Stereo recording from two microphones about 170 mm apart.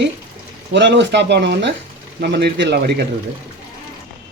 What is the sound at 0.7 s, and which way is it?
Speech, 90° right.